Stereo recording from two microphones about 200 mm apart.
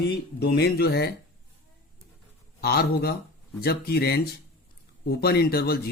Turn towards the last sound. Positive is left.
turn(degrees=50)  # may be behind; listen again after turning